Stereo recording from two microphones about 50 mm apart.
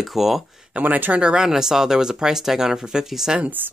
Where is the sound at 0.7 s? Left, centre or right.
Right.